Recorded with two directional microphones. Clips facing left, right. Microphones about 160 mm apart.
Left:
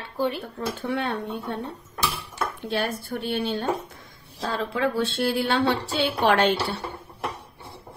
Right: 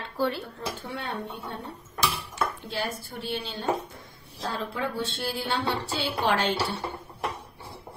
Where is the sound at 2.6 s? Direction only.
65° left (ahead or behind).